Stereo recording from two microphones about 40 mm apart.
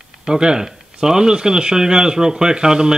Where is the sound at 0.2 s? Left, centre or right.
Centre.